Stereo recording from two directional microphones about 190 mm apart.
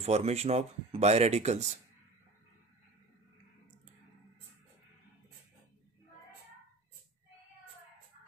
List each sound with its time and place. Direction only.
0.0 s speech: 35° right (ahead or behind)